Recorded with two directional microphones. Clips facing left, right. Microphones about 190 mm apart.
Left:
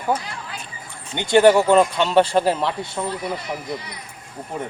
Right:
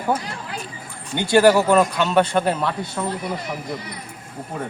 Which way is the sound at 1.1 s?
20° left (ahead or behind).